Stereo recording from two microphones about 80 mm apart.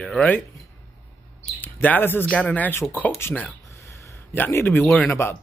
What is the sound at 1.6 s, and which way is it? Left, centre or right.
Speech, left.